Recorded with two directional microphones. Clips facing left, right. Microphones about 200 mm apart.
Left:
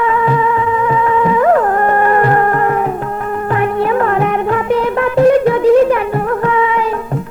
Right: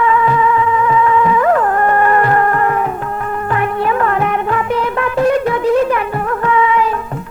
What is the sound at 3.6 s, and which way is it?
Music, 30° left (ahead or behind).